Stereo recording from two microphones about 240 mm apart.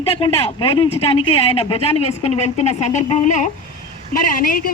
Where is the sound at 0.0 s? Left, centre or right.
Left.